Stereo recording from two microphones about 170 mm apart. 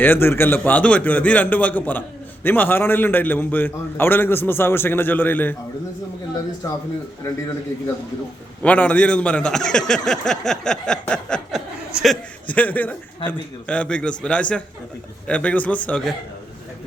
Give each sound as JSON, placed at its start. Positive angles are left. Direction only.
{"t": 0.0, "sound": "a man's voice", "side_deg": 10}
{"t": 6.6, "sound": "a man's voice", "side_deg": 20}
{"t": 8.6, "sound": "a man's voice", "side_deg": 10}